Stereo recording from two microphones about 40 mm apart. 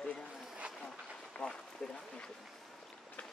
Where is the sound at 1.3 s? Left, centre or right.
Left.